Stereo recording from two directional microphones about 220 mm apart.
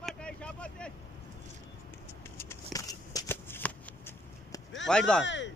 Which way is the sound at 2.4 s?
15° left (ahead or behind).